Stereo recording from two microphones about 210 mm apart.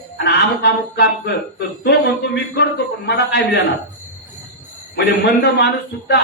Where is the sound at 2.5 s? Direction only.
55° left (ahead or behind).